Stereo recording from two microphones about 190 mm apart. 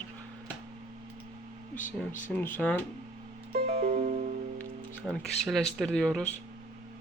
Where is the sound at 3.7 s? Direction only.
35° right (ahead or behind).